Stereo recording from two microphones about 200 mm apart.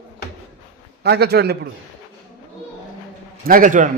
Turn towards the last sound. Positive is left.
turn(degrees=-40)  # may be behind; listen again after turning